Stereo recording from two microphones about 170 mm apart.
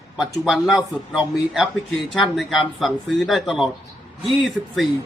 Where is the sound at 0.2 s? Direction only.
Centre (ahead or behind).